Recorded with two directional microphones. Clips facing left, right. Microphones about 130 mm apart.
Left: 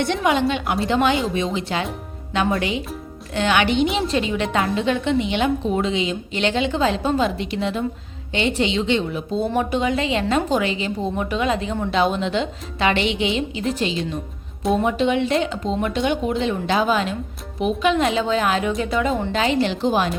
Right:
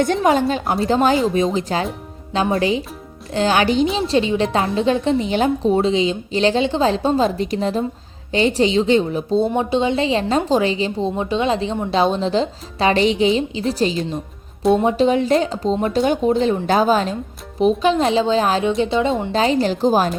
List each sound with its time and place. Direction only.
0.0 s a woman's voice: 40° right (ahead or behind)
9.5 s a woman's voice: 25° right (ahead or behind)